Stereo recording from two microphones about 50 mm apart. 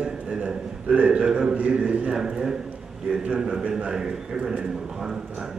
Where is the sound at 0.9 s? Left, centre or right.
Right.